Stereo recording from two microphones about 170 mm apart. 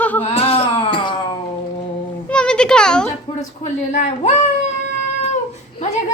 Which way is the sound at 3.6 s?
40° left (ahead or behind).